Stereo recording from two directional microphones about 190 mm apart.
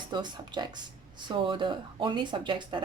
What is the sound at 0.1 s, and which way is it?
Speech, 25° right (ahead or behind).